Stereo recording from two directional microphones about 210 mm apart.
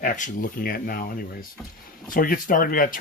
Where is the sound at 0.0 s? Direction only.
40° left (ahead or behind).